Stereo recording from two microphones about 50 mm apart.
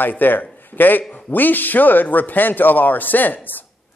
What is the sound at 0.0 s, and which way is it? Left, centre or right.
A man's voice, left.